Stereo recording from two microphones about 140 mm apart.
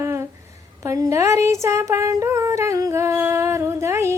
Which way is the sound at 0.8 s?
20° right (ahead or behind).